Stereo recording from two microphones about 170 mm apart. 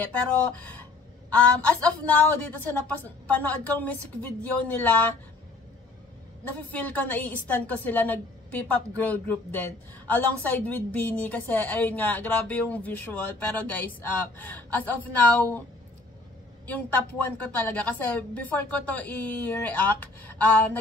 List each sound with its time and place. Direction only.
0.0 s a woman's voice: 10° left (ahead or behind)
6.7 s a woman's voice: 10° left (ahead or behind)
16.6 s a woman's voice: 10° left (ahead or behind)